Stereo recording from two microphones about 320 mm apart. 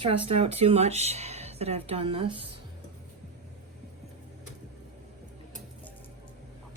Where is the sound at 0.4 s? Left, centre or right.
Centre.